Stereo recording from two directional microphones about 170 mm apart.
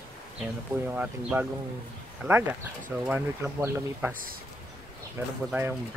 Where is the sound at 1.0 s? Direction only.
10° right (ahead or behind).